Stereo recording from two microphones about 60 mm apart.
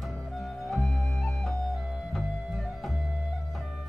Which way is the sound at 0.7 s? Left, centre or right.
Centre.